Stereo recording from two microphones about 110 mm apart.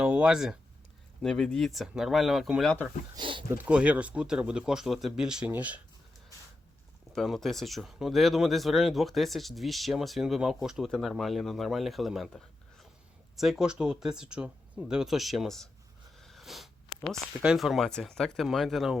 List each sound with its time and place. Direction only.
0.0 s a sound: 10° right (ahead or behind)
1.2 s speech: 5° left (ahead or behind)
3.2 s a sound: 50° right (ahead or behind)
3.6 s speech: 10° right (ahead or behind)
7.1 s speech: centre (ahead or behind)
13.3 s speech: 5° right (ahead or behind)
16.1 s sniff: centre (ahead or behind)
17.4 s speech: 5° right (ahead or behind)